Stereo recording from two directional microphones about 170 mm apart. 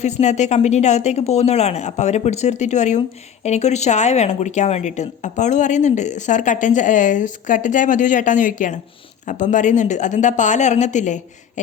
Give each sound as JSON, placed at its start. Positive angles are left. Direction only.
{"t": 0.0, "sound": "a woman's voice", "side_deg": 40}